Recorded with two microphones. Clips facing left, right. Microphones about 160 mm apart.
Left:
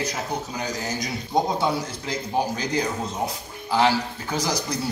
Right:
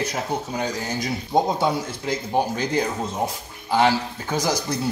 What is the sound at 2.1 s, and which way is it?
Speech, 55° right (ahead or behind).